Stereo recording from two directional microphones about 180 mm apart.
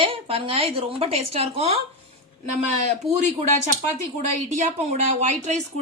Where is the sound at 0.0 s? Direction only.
30° right (ahead or behind).